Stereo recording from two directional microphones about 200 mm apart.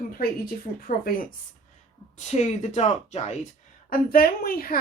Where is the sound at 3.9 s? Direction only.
45° left (ahead or behind).